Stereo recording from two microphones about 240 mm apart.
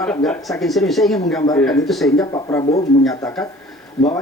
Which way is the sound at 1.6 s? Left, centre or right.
Centre.